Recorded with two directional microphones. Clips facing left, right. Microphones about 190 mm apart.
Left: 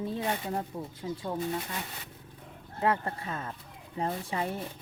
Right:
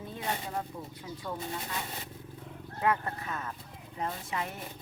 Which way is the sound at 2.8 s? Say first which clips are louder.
Left 1 dB; 30° left (ahead or behind).